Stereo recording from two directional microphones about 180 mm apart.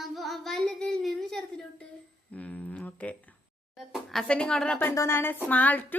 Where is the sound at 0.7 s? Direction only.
5° left (ahead or behind).